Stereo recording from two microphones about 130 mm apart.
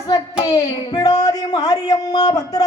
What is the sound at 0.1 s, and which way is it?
A man's voice, 30° left (ahead or behind).